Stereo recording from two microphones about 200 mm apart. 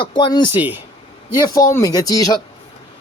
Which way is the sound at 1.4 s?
15° left (ahead or behind).